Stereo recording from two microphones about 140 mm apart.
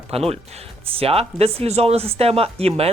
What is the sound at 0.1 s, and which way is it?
Speech, 45° right (ahead or behind).